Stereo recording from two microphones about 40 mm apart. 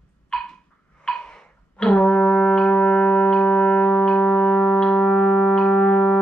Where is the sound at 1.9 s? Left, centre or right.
Left.